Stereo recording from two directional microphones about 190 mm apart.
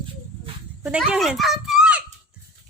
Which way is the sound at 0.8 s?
5° right (ahead or behind).